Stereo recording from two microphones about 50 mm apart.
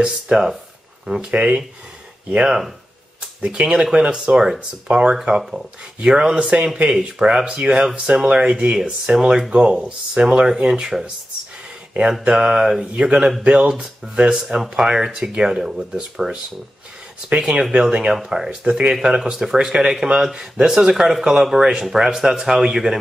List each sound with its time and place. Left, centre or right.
0.0 s speech: centre
14.6 s speech: centre
17.4 s speech: centre